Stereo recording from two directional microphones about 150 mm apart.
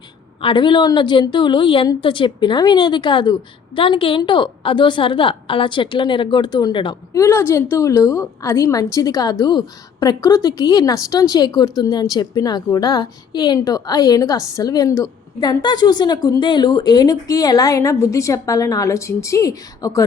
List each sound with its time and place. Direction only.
0.4 s a woman's voice: 30° left (ahead or behind)
7.2 s a woman's voice: 20° left (ahead or behind)